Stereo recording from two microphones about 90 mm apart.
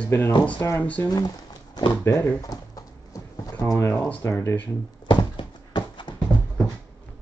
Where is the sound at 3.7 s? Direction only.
40° left (ahead or behind).